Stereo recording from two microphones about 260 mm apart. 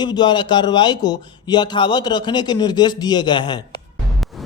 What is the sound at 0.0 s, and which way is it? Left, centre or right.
A man's voice, centre.